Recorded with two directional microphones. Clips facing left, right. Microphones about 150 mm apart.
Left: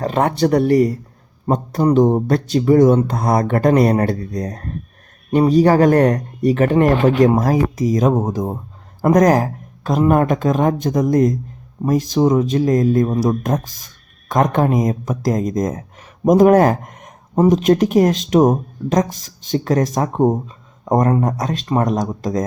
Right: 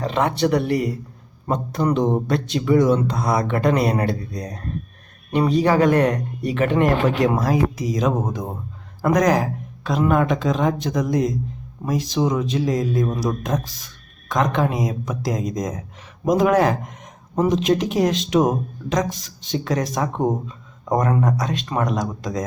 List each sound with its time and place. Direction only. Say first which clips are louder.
0.0 s a man's voice: left 3 dB; 50° left (ahead or behind)